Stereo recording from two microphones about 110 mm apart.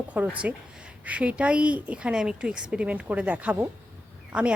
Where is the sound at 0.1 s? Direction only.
15° right (ahead or behind).